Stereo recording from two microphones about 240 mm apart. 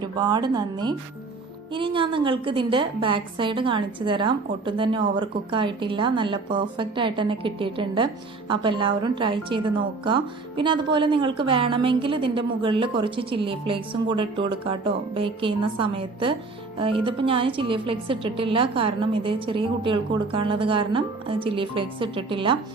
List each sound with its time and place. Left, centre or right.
0.0 s a woman's voice: centre